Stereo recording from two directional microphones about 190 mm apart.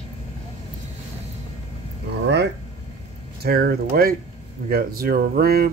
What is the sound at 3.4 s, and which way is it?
Speech, 55° right (ahead or behind).